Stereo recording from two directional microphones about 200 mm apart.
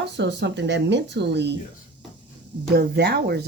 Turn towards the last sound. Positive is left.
turn(degrees=-55)  # may be behind; listen again after turning